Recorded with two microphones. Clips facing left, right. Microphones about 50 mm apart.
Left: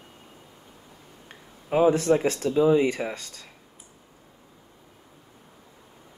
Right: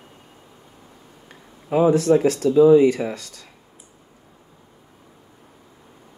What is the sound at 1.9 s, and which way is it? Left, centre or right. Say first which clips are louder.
Speech: right 5 dB; left.